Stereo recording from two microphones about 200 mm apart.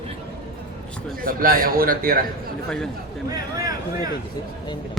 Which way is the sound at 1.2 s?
45° right (ahead or behind).